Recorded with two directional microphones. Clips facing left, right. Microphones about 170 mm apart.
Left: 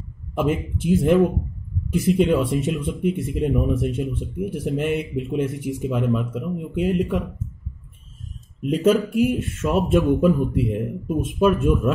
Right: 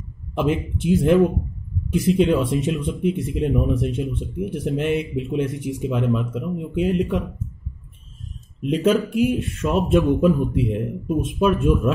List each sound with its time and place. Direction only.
0.3 s speech: centre (ahead or behind)
8.8 s speech: centre (ahead or behind)